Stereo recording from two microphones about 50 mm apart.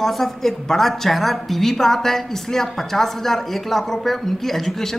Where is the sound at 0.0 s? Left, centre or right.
Centre.